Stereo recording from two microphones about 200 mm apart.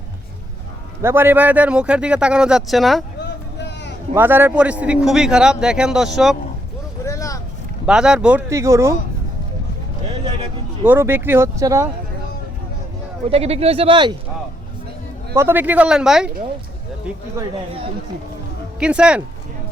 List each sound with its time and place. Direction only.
1.0 s a man's voice: 10° right (ahead or behind)
4.1 s a man's voice: 10° right (ahead or behind)
7.0 s vehicle: 15° left (ahead or behind)
7.9 s speech: 5° right (ahead or behind)
10.8 s speech: 10° right (ahead or behind)
13.3 s speech: 30° right (ahead or behind)
15.4 s speech: 10° right (ahead or behind)
18.8 s a man's voice: 5° right (ahead or behind)